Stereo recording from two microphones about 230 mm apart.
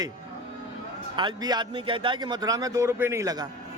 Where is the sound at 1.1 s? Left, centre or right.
Centre.